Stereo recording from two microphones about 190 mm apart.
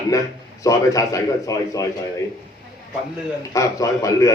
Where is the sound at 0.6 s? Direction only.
15° left (ahead or behind).